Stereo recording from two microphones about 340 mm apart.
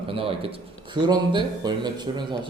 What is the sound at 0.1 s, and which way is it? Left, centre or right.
A man's voice, centre.